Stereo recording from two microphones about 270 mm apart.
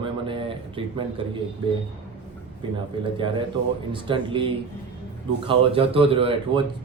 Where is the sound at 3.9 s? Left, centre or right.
Centre.